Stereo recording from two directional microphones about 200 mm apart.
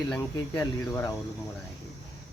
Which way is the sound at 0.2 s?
20° left (ahead or behind).